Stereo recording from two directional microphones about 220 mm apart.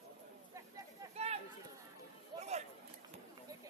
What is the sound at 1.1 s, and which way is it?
Chatter, 30° right (ahead or behind).